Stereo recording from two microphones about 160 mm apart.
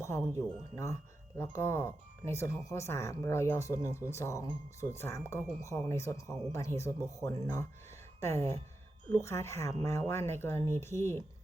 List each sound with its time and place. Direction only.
0.3 s speech: 20° left (ahead or behind)